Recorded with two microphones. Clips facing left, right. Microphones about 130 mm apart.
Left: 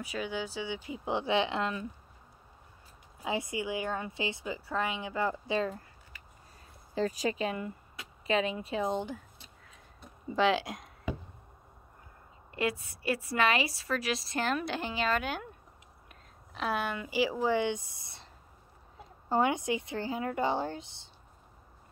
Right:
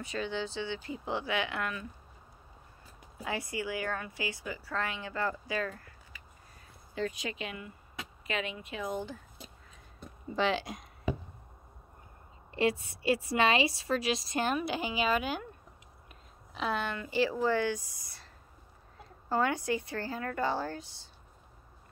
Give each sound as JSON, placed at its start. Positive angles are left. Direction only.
{"t": 0.0, "sound": "speech", "side_deg": 10}
{"t": 3.3, "sound": "a woman's voice", "side_deg": 20}
{"t": 7.0, "sound": "speech", "side_deg": 35}
{"t": 10.2, "sound": "speech", "side_deg": 0}
{"t": 12.5, "sound": "a woman's voice", "side_deg": -25}
{"t": 14.6, "sound": "a woman's voice", "side_deg": -5}